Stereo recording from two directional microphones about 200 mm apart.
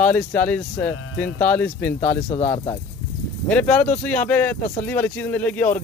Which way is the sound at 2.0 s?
35° left (ahead or behind).